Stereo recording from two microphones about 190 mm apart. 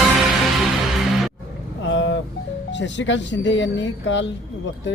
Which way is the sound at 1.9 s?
75° left (ahead or behind).